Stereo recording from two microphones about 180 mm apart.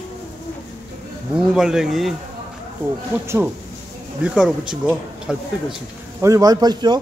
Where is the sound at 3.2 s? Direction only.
15° right (ahead or behind).